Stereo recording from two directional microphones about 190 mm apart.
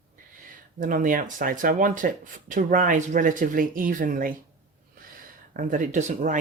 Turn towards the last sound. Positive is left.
turn(degrees=-40)  # may be behind; listen again after turning